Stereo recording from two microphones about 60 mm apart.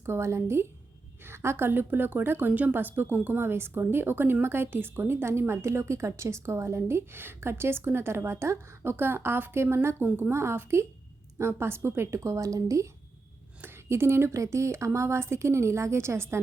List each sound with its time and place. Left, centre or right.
0.0 s a woman's voice: right
13.8 s a woman's voice: right